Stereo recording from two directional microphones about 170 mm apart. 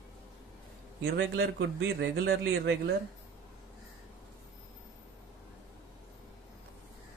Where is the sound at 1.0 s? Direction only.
80° right.